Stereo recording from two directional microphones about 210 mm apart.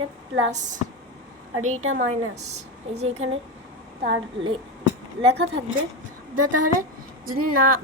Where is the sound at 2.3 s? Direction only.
30° right (ahead or behind).